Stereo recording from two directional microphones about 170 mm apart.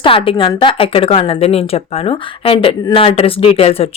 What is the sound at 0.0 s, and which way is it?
A woman's voice, 30° left (ahead or behind).